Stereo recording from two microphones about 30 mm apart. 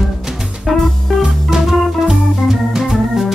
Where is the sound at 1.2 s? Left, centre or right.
Centre.